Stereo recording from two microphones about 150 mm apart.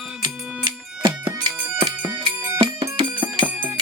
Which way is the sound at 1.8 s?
35° right (ahead or behind).